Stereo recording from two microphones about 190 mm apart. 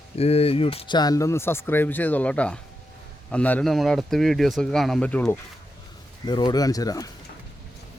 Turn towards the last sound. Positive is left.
turn(degrees=20)  # may be behind; listen again after turning